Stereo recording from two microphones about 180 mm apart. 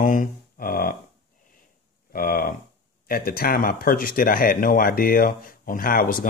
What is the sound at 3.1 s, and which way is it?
Speech, 55° left (ahead or behind).